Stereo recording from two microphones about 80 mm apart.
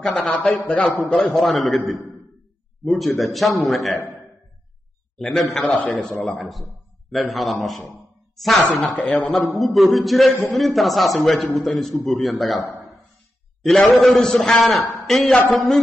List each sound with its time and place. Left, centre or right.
0.0 s a man's voice: centre
0.3 s a man's voice: centre
1.1 s a man's voice: centre
5.2 s a man's voice: centre
5.7 s a man's voice: centre
5.9 s a man's voice: centre
8.6 s speech: centre
9.6 s a man's voice: centre